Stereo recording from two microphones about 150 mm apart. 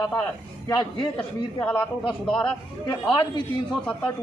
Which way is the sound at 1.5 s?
15° left (ahead or behind).